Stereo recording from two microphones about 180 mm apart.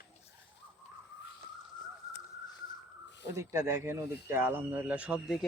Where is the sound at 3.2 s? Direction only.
15° right (ahead or behind).